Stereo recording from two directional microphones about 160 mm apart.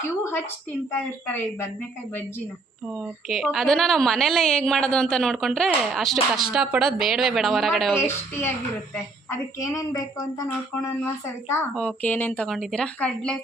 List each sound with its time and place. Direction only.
0.2 s a woman's voice: 15° left (ahead or behind)
3.2 s a woman's voice: centre (ahead or behind)
7.9 s a woman's voice: 15° left (ahead or behind)
10.8 s a woman's voice: 15° left (ahead or behind)